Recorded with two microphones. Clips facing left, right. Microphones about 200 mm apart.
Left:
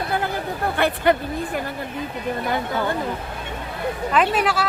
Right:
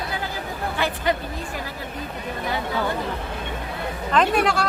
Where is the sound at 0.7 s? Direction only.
55° left (ahead or behind).